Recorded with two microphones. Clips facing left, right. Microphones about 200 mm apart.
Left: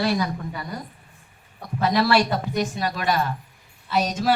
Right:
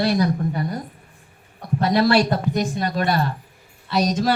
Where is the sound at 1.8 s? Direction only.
40° right (ahead or behind).